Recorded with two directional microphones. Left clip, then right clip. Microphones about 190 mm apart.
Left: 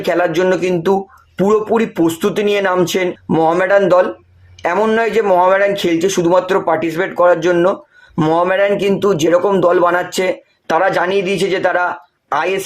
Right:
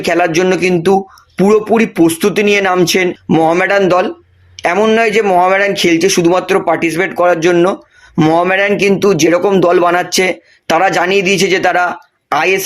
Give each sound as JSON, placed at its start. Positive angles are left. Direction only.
{"t": 0.0, "sound": "speech", "side_deg": -30}